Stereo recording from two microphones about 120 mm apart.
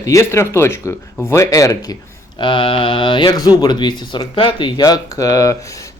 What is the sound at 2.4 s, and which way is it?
Mantra, 45° left (ahead or behind).